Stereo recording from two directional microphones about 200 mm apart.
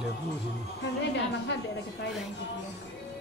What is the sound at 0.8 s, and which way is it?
Speech, 60° left (ahead or behind).